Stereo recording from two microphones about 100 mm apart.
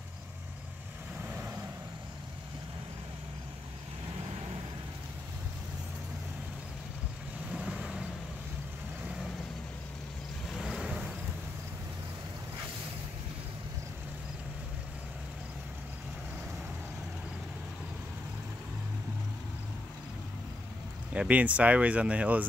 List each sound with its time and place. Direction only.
1.2 s vehicle: 20° right (ahead or behind)
7.5 s vehicle: 10° right (ahead or behind)
10.5 s vehicle: centre (ahead or behind)
21.1 s speech: 15° right (ahead or behind)